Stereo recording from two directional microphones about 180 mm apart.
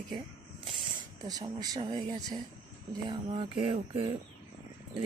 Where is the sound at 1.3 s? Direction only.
20° right (ahead or behind).